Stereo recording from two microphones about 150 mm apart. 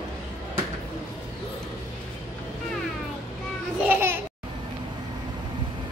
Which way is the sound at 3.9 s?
15° right (ahead or behind).